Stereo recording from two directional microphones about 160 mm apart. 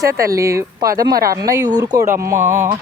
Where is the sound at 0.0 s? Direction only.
20° right (ahead or behind).